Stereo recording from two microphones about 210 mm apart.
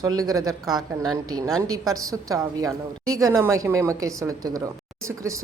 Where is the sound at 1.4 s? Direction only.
15° right (ahead or behind).